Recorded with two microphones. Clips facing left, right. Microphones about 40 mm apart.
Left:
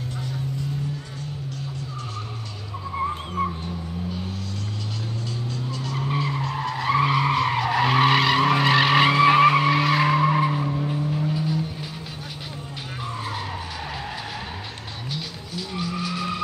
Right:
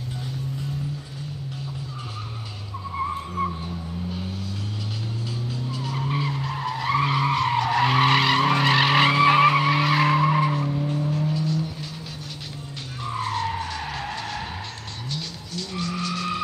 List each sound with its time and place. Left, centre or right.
3.0 s vehicle: left
3.4 s vehicle: centre
5.5 s vehicle: centre
6.4 s skidding: centre
11.0 s vehicle: centre
13.2 s vehicle: centre
13.6 s skidding: centre
15.0 s vehicle: centre